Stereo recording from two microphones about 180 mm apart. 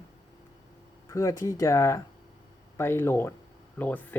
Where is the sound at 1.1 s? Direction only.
20° left (ahead or behind).